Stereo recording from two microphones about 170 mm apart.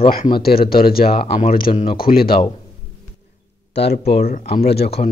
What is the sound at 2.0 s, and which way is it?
Speech, 60° left (ahead or behind).